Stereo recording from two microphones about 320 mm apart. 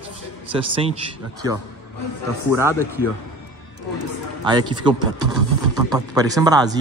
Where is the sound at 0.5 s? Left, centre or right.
Centre.